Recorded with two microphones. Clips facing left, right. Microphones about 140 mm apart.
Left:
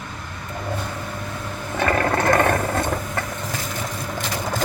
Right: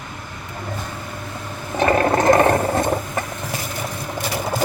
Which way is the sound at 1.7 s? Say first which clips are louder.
Right 4 dB; 20° right (ahead or behind).